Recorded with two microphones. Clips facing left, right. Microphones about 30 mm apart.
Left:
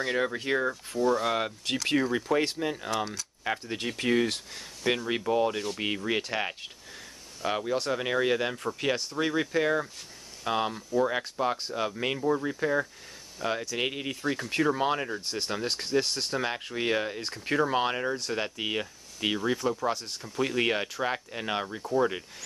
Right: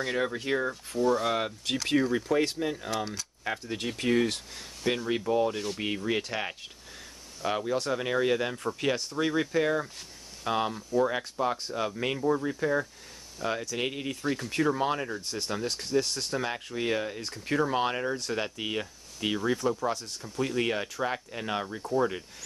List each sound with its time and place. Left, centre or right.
0.0 s speech: centre